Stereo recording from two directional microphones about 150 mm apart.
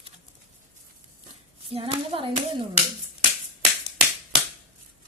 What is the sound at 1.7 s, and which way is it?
Speech, 35° right (ahead or behind).